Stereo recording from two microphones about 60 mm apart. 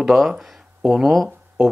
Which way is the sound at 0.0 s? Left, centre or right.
Centre.